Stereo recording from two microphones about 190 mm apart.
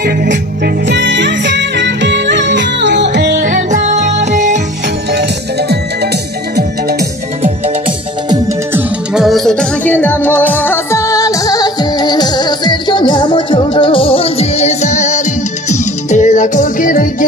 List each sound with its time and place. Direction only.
0.0 s music: 55° right (ahead or behind)
0.8 s music: 70° right (ahead or behind); by 4.6 s 40° right (ahead or behind)
6.5 s music: 55° right (ahead or behind)
8.7 s music: centre (ahead or behind); by 17.1 s 45° left (ahead or behind)